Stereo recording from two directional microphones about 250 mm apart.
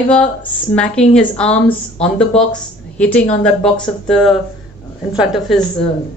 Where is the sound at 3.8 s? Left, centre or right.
Centre.